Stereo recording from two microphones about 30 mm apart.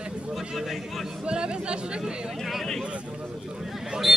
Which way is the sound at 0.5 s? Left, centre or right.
Centre.